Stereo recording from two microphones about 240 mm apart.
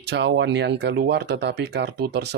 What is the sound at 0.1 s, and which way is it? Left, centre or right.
Speech, right.